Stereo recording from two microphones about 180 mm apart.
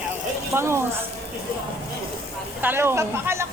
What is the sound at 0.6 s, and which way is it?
Speech, 15° right (ahead or behind).